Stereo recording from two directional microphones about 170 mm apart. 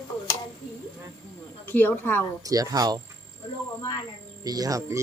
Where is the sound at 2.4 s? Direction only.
20° right (ahead or behind).